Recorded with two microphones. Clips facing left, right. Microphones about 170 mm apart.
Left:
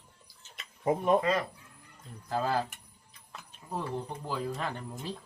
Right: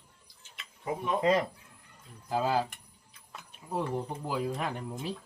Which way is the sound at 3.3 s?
10° right (ahead or behind).